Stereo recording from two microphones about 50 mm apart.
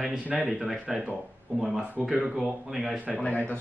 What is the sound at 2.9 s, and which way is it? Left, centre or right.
Speech, right.